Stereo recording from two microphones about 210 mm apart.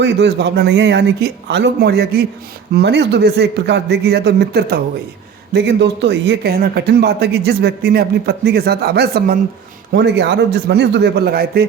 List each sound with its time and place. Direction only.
0.0 s speech: 55° right (ahead or behind)